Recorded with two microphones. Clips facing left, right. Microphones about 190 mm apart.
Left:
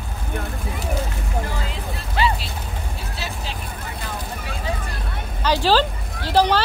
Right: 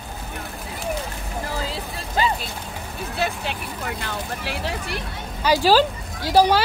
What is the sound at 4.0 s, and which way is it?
Speech, 75° right (ahead or behind).